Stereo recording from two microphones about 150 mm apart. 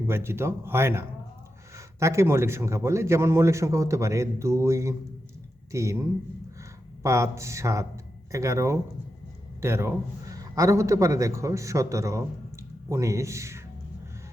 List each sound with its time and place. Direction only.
0.1 s a man's voice: 15° right (ahead or behind)